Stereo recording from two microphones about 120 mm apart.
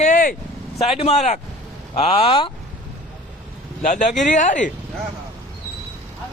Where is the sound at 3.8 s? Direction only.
90° left.